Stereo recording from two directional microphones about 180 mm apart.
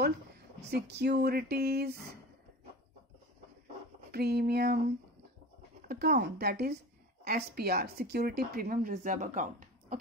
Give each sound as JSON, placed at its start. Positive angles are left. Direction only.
{"t": 0.7, "sound": "a woman's voice", "side_deg": -65}
{"t": 4.1, "sound": "a woman's voice", "side_deg": -60}